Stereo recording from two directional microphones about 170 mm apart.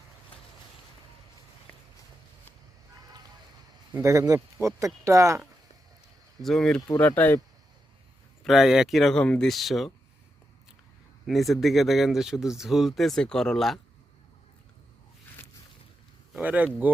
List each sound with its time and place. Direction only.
1.7 s a sound: 5° left (ahead or behind)
3.9 s speech: 15° right (ahead or behind)
6.4 s speech: centre (ahead or behind)
6.8 s speech: 15° left (ahead or behind)
8.4 s speech: centre (ahead or behind)
11.3 s speech: centre (ahead or behind)
16.3 s speech: 10° right (ahead or behind)